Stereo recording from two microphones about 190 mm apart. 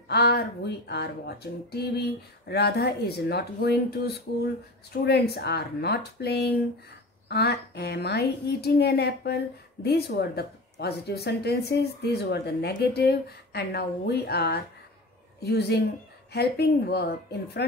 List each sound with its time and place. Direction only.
0.1 s speech: 55° left (ahead or behind)